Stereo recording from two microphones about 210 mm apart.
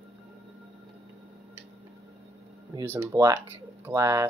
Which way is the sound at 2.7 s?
10° right (ahead or behind).